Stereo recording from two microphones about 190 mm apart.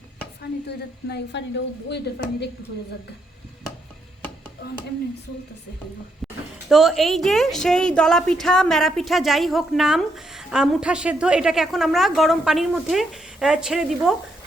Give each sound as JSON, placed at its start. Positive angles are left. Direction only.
{"t": 0.7, "sound": "speech", "side_deg": 60}
{"t": 6.7, "sound": "a woman's voice", "side_deg": 0}